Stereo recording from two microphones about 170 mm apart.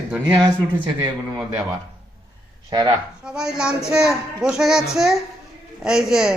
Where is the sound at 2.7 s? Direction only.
25° right (ahead or behind).